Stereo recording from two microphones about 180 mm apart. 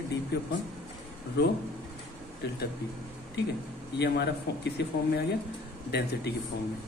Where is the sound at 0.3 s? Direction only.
65° left (ahead or behind).